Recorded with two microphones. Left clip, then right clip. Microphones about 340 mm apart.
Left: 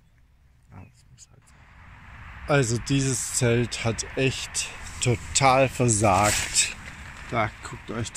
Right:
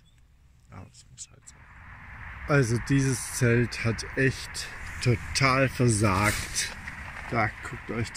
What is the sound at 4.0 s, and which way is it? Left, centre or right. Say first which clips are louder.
Speech: right 1 dB; centre.